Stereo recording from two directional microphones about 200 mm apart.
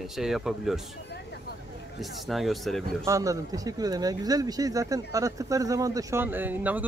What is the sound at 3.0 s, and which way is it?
Speech, 15° right (ahead or behind).